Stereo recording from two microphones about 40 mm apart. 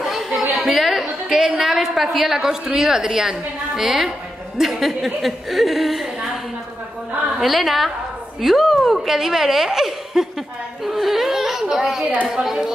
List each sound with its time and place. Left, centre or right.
0.0 s chatter: centre
1.4 s a woman's voice: centre
10.8 s a sound: centre
11.7 s a woman's voice: centre
12.0 s speech: right
12.4 s a woman's voice: centre